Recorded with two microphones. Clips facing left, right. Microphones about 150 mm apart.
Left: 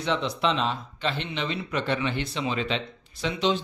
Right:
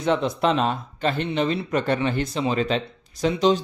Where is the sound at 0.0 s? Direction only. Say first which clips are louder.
Right 5 dB; 45° right (ahead or behind).